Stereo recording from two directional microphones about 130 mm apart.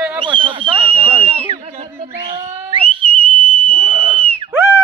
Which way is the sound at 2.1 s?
40° right (ahead or behind).